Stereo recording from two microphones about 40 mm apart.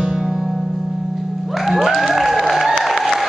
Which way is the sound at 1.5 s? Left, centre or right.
Centre.